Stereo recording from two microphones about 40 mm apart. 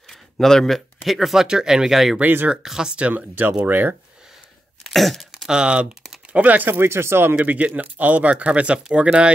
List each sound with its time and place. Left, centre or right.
0.4 s speech: centre
1.0 s speech: centre
1.5 s speech: centre
3.1 s speech: right
4.8 s throat clearing: centre
5.5 s speech: right
6.3 s speech: right
6.8 s speech: right
7.4 s speech: right
8.5 s speech: right